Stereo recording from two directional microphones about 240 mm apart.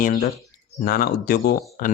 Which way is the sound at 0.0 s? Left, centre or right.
Left.